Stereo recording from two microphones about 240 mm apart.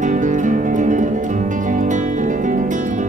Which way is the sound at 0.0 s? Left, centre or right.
Right.